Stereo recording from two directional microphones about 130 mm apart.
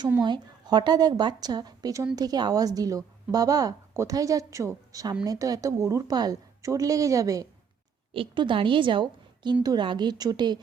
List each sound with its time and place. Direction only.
0.2 s a woman's voice: 35° right (ahead or behind)
8.1 s a woman's voice: 40° right (ahead or behind)